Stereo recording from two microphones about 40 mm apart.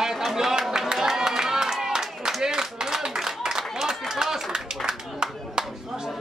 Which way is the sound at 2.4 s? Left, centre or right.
Centre.